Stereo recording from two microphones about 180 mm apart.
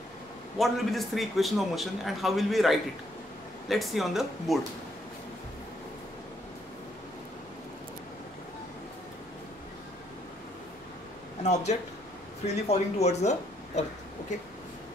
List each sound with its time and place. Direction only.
0.6 s a man's voice: centre (ahead or behind)
11.4 s speech: 40° left (ahead or behind)